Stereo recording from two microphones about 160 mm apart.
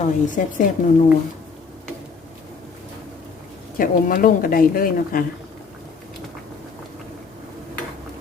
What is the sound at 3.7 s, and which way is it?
A woman's voice, 60° left (ahead or behind).